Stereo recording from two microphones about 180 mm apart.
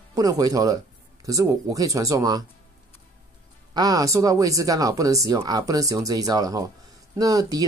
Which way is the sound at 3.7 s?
20° right (ahead or behind).